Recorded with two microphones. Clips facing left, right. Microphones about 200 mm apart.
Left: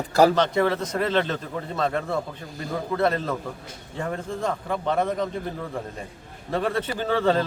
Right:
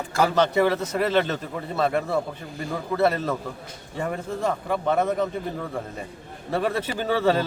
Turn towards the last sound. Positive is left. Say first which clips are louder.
# even
turn(degrees=-10)  # may be behind; listen again after turning